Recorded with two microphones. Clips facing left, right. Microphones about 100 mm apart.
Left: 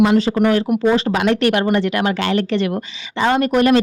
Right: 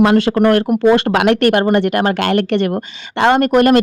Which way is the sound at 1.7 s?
50° right (ahead or behind).